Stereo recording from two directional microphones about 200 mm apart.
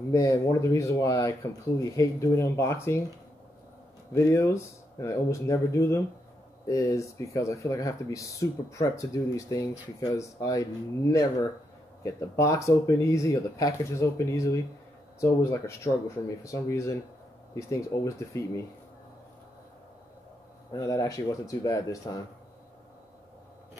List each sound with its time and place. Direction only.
0.1 s speech: 15° left (ahead or behind)
4.1 s speech: 15° left (ahead or behind)
20.7 s speech: 15° left (ahead or behind)